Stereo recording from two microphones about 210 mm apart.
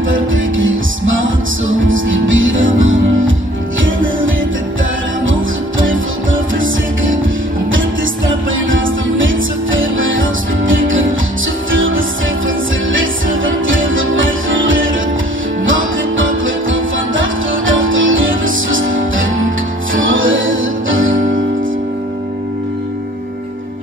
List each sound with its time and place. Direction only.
0.1 s music: 65° right (ahead or behind)
8.5 s music: 65° right (ahead or behind)